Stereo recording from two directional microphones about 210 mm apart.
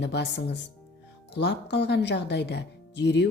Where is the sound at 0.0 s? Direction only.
55° left (ahead or behind).